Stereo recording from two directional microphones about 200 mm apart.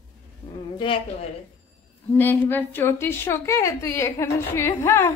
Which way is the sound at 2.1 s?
10° left (ahead or behind).